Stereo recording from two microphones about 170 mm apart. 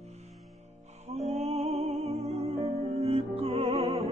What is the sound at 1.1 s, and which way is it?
Music, 40° right (ahead or behind).